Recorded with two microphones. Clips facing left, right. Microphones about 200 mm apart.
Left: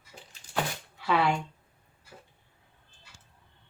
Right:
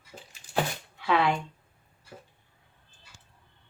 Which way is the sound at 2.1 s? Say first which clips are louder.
Right 4 dB; 45° right (ahead or behind).